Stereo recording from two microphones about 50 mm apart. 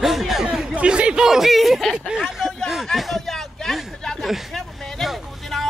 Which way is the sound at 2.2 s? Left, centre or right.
Centre.